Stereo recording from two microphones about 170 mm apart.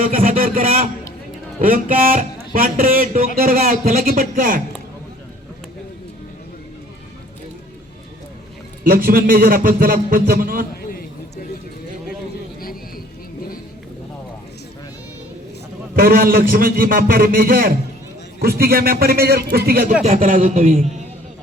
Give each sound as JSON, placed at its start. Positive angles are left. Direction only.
{"t": 0.0, "sound": "a sound", "side_deg": -55}
{"t": 1.6, "sound": "speech", "side_deg": -55}
{"t": 8.8, "sound": "speech", "side_deg": -60}
{"t": 16.0, "sound": "speech", "side_deg": -60}